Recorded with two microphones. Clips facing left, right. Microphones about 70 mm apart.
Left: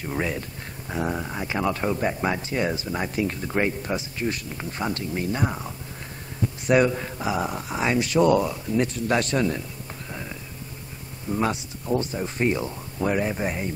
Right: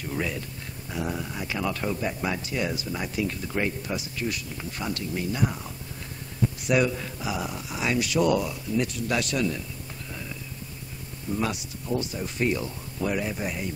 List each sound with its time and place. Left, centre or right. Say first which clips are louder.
0.1 s speech: left 3 dB; left
6.7 s speech: left 5 dB; left
11.3 s speech: left 4 dB; left